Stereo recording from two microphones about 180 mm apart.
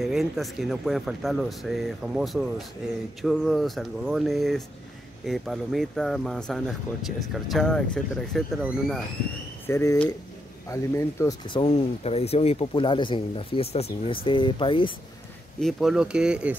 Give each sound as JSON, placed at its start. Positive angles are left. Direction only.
{"t": 0.0, "sound": "speech", "side_deg": 0}
{"t": 9.7, "sound": "speech", "side_deg": 15}
{"t": 11.4, "sound": "speech", "side_deg": 30}
{"t": 15.6, "sound": "speech", "side_deg": 0}